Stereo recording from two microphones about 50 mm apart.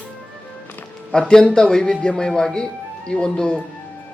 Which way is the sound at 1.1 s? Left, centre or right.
Centre.